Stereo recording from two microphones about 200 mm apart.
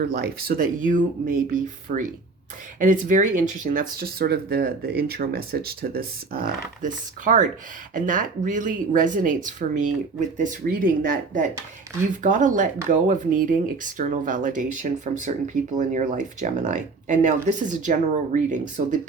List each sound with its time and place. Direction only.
0.0 s speech: 50° right (ahead or behind)